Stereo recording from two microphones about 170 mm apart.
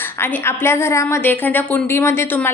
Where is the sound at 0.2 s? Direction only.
15° left (ahead or behind).